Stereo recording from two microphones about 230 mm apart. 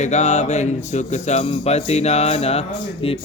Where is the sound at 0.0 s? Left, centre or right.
Left.